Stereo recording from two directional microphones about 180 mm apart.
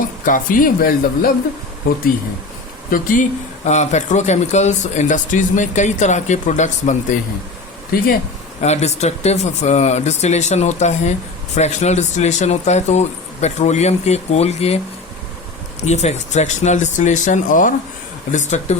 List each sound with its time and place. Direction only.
0.3 s speech: 50° left (ahead or behind)
2.9 s speech: 45° left (ahead or behind)
8.6 s speech: 40° left (ahead or behind)
15.8 s speech: 40° left (ahead or behind)